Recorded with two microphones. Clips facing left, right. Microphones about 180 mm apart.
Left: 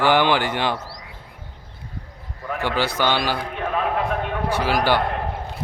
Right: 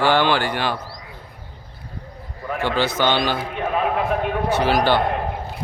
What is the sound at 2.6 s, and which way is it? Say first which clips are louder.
Speech: right 2 dB; 10° left (ahead or behind).